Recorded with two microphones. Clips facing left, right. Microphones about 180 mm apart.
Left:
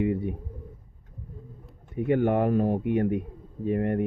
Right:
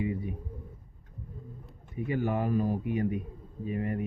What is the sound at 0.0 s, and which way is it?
Speech, 65° left (ahead or behind).